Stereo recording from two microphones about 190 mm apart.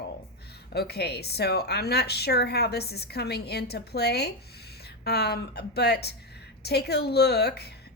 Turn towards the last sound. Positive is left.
turn(degrees=60)  # may be behind; listen again after turning